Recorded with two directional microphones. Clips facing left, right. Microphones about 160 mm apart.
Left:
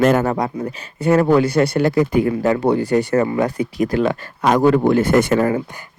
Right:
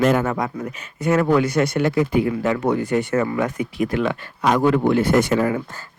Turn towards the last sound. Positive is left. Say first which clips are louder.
# left 3 dB
turn(degrees=45)  # may be behind; listen again after turning